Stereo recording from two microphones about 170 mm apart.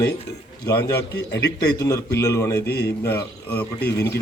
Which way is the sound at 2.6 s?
70° left (ahead or behind).